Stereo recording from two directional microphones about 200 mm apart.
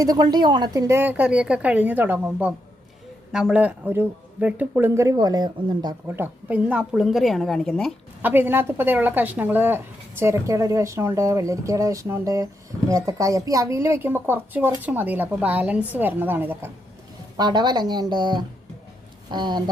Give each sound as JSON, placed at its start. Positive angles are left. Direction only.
{"t": 0.0, "sound": "a woman's voice", "side_deg": -20}
{"t": 6.1, "sound": "a woman's voice", "side_deg": -10}
{"t": 8.2, "sound": "a woman's voice", "side_deg": -10}
{"t": 17.3, "sound": "speech", "side_deg": -20}